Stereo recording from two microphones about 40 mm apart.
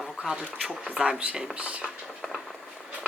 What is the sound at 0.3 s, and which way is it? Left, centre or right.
Speech, centre.